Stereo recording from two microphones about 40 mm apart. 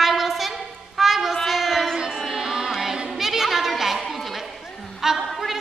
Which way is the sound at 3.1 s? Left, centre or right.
Centre.